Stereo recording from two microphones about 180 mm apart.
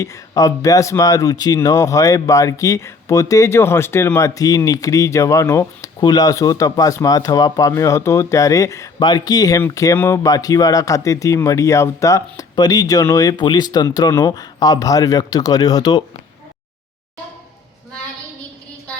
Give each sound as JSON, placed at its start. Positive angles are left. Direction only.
{"t": 0.0, "sound": "speech", "side_deg": 20}